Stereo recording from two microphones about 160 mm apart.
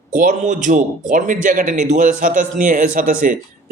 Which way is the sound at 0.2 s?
55° right (ahead or behind).